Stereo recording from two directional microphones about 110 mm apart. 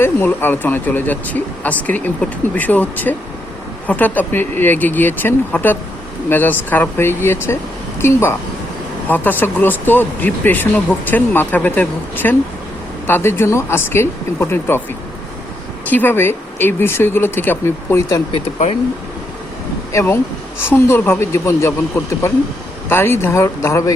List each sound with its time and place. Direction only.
0.0 s speech: 20° left (ahead or behind)
15.9 s speech: 15° left (ahead or behind)
19.9 s speech: 25° left (ahead or behind)
22.9 s speech: 20° left (ahead or behind)